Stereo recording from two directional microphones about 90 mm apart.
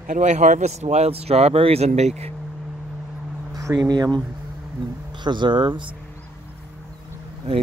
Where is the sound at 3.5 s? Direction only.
40° right (ahead or behind); by 6.0 s 60° right (ahead or behind).